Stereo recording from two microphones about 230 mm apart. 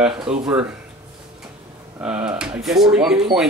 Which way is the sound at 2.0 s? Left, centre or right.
Centre.